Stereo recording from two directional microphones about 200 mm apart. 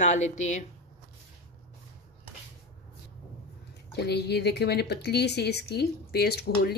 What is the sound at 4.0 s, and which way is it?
A woman's voice, 55° left (ahead or behind).